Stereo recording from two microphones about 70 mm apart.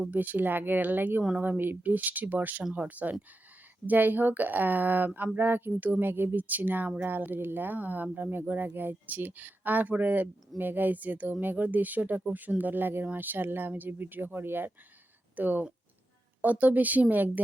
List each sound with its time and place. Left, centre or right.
0.1 s speech: right